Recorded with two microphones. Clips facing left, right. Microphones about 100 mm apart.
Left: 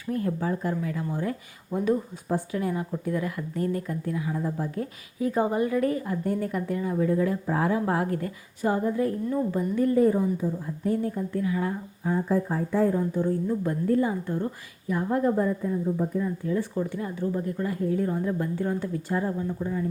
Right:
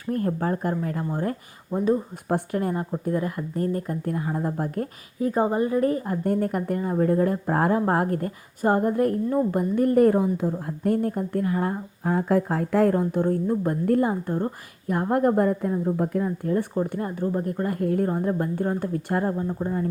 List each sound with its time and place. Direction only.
0.0 s a woman's voice: 45° right (ahead or behind)
2.3 s a woman's voice: 50° right (ahead or behind)
5.3 s a woman's voice: 35° right (ahead or behind)
12.1 s a woman's voice: 70° right (ahead or behind); by 19.3 s 55° right (ahead or behind)
19.3 s a woman's voice: 40° right (ahead or behind)